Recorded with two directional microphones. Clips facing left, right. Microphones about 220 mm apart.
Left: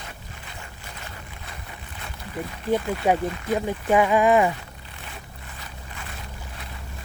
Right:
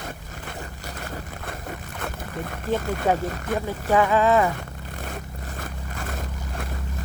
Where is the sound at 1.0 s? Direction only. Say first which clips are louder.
Right 9 dB; 50° right (ahead or behind).